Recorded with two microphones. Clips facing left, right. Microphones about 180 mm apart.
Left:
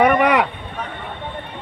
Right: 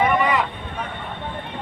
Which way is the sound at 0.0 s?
70° left (ahead or behind).